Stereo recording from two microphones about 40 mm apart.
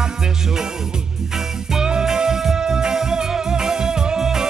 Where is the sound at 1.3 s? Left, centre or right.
Centre.